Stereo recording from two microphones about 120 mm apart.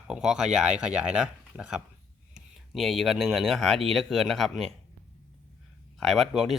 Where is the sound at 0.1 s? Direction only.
5° right (ahead or behind).